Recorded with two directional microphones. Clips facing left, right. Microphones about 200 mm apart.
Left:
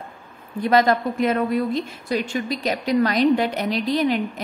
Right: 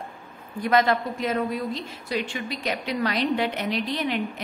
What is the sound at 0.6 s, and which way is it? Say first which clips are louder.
Speech: left 3 dB; 35° left (ahead or behind).